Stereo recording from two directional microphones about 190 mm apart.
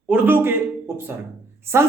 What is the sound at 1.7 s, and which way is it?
Speech, 15° right (ahead or behind).